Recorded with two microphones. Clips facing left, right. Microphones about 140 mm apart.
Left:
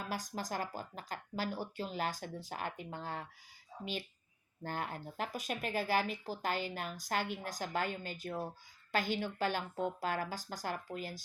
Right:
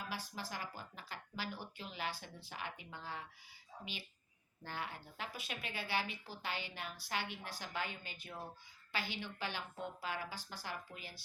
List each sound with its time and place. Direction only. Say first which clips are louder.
0.1 s speech: left 6 dB; 45° left (ahead or behind)
4.6 s speech: left 6 dB; 45° left (ahead or behind)